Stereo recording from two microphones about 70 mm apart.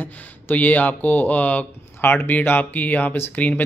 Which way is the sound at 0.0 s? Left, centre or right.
Left.